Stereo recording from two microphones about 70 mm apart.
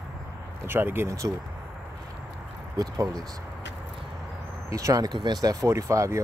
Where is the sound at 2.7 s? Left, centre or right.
Right.